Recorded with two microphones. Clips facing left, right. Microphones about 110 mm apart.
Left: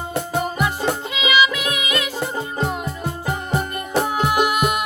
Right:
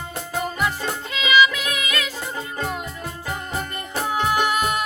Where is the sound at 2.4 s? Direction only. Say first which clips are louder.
Left 1 dB; 25° left (ahead or behind).